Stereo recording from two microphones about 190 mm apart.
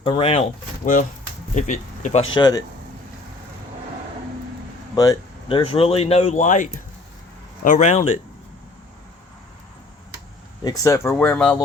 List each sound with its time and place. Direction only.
0.0 s speech: 30° left (ahead or behind)
1.5 s speech: 40° left (ahead or behind)
2.3 s speech: 20° left (ahead or behind)
4.9 s speech: 20° left (ahead or behind); by 8.2 s 35° left (ahead or behind)
10.6 s speech: 20° left (ahead or behind)